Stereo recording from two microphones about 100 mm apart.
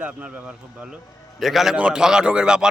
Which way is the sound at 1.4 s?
Centre (ahead or behind).